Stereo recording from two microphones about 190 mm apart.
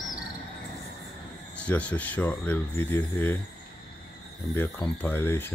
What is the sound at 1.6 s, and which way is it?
Speech, 5° left (ahead or behind).